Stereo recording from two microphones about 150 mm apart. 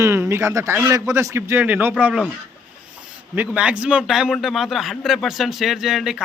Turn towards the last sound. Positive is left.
turn(degrees=0)  # may be behind; listen again after turning